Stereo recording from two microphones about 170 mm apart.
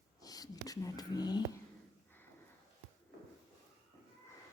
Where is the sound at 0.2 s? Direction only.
20° left (ahead or behind).